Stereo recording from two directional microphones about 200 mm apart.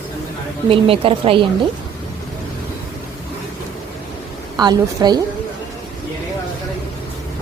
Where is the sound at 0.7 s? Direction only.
30° right (ahead or behind).